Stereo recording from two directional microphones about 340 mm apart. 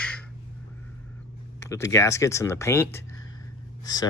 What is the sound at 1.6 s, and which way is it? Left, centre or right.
Speech, centre.